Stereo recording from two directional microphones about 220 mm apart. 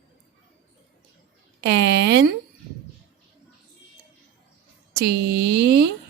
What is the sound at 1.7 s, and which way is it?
Speech, 50° right (ahead or behind).